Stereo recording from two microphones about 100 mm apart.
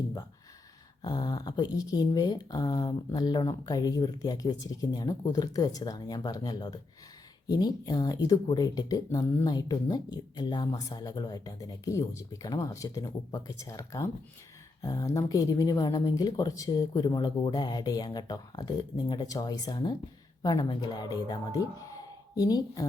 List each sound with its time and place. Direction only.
1.0 s speech: 40° left (ahead or behind)